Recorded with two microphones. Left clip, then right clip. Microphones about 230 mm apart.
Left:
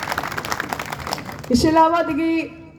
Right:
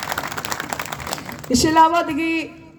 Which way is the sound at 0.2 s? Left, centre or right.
Centre.